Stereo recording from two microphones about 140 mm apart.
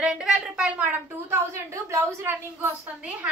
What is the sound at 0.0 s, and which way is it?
A woman's voice, 5° right (ahead or behind).